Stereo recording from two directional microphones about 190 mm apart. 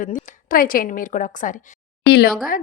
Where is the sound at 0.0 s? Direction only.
45° left (ahead or behind).